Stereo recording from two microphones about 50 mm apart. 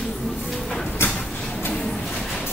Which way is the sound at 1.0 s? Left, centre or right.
Left.